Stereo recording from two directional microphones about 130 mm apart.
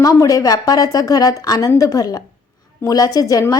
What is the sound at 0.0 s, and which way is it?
A woman's voice, 25° left (ahead or behind).